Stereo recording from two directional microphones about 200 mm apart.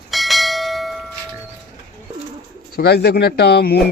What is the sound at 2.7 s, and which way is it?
Speech, 55° left (ahead or behind).